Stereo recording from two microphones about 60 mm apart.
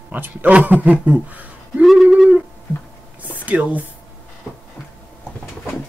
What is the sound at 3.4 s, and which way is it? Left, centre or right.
Speech, right.